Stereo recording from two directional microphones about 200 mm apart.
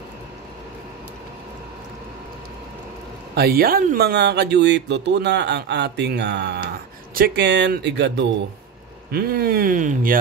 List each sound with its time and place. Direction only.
3.3 s speech: 50° right (ahead or behind)